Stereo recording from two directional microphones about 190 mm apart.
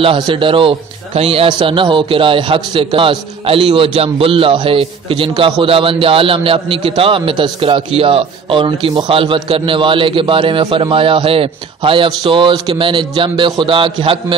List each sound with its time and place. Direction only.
0.0 s a man's voice: 25° right (ahead or behind)